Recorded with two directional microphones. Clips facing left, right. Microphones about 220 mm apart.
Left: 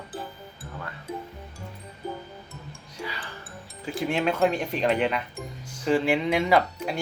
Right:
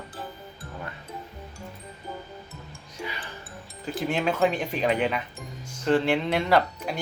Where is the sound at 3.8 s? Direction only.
5° right (ahead or behind).